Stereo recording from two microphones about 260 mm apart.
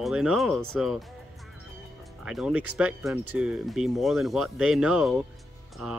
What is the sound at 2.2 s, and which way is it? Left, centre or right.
Speech, centre.